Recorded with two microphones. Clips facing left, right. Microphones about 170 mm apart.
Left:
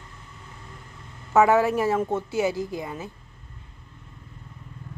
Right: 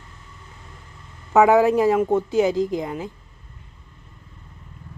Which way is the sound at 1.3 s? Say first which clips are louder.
Right 4 dB; 15° right (ahead or behind).